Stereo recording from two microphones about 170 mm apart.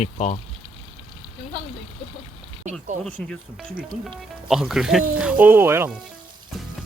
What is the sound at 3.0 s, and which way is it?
Speech, 10° left (ahead or behind).